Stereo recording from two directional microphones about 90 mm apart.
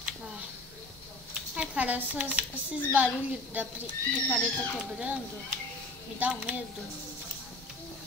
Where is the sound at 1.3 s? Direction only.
15° right (ahead or behind).